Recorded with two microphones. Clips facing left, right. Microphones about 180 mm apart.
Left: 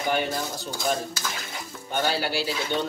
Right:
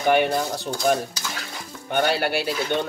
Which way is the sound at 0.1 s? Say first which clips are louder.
Right 8 dB; 65° right (ahead or behind).